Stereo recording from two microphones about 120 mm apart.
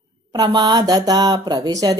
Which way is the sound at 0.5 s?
35° right (ahead or behind).